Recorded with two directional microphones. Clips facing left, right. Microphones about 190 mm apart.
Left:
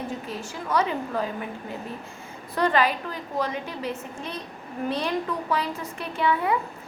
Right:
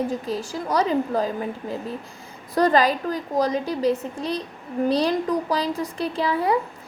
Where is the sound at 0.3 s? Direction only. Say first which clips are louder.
Right 4 dB; 35° right (ahead or behind).